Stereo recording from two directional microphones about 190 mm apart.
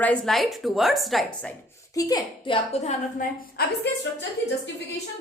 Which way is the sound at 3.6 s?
55° left (ahead or behind).